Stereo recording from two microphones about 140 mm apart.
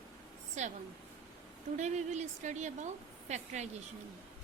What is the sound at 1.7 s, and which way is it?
A woman's voice, 55° right (ahead or behind).